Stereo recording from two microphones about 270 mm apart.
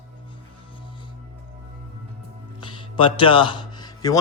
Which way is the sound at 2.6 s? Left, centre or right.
Centre.